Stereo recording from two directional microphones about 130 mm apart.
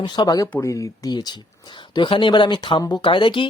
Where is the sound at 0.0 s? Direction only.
35° left (ahead or behind).